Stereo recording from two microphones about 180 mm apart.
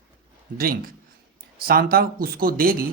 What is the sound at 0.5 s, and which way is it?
Speech, 55° right (ahead or behind).